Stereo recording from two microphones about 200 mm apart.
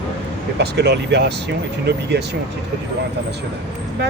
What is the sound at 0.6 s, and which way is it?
Speech, 55° right (ahead or behind).